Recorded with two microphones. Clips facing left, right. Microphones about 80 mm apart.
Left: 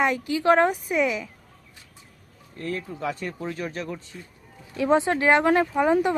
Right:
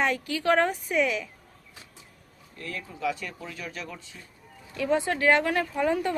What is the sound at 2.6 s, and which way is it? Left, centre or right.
Speech, left.